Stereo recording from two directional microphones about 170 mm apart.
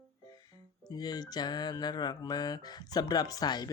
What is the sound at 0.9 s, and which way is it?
Speech, 25° left (ahead or behind).